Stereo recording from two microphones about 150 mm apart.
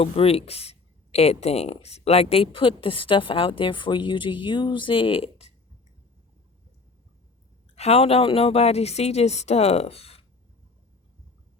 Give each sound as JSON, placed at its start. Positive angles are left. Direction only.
{"t": 0.0, "sound": "speech", "side_deg": 40}
{"t": 7.8, "sound": "a woman's voice", "side_deg": 45}